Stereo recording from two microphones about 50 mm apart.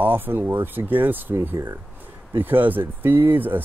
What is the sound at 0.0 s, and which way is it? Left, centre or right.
Speech, right.